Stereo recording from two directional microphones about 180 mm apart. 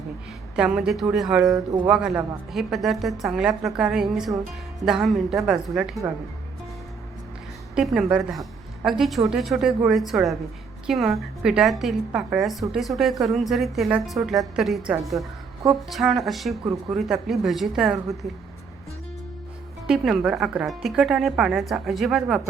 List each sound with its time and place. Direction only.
0.5 s speech: 5° right (ahead or behind)
1.5 s speech: 25° right (ahead or behind)
1.9 s speech: 5° right (ahead or behind)
7.8 s a woman's voice: 5° right (ahead or behind)
19.9 s speech: 5° right (ahead or behind)